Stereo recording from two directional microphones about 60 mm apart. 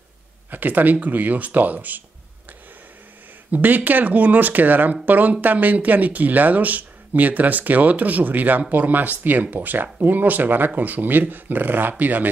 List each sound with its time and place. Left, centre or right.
0.5 s speech: right
3.5 s speech: right